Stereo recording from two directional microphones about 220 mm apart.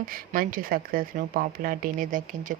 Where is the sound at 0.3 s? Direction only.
40° right (ahead or behind).